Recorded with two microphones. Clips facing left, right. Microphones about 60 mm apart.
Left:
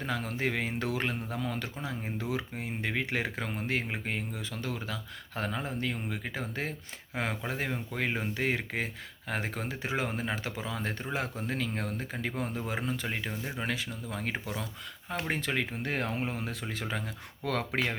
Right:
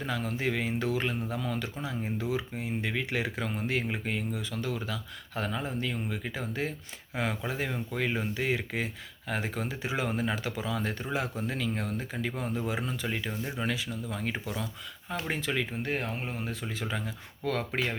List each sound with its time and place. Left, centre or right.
0.0 s speech: left
15.1 s speech: left
15.8 s speech: left
17.4 s speech: left